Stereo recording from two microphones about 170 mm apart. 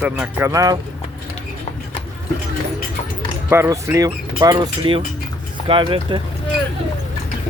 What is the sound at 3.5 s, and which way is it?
Speech, 15° right (ahead or behind).